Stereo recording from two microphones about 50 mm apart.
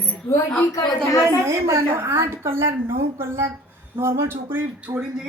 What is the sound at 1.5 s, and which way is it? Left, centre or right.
A woman's voice, right.